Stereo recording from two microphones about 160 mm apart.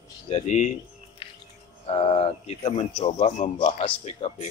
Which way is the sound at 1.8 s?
40° left (ahead or behind).